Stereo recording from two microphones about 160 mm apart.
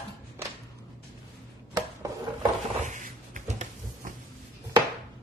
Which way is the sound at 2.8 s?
50° right (ahead or behind).